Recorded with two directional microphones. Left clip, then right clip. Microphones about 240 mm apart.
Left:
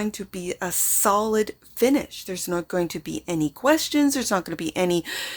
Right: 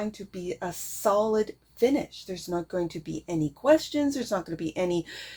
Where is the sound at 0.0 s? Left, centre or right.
Left.